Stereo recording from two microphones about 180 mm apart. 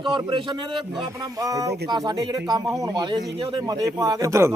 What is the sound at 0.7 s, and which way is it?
Speech, centre (ahead or behind).